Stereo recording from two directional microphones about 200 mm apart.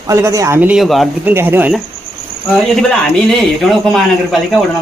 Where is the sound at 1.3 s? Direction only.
10° right (ahead or behind).